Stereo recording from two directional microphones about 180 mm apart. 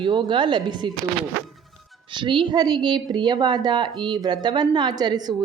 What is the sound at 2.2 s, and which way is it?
A woman's voice, 25° right (ahead or behind).